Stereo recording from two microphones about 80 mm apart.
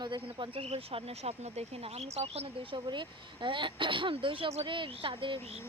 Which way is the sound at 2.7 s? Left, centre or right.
Right.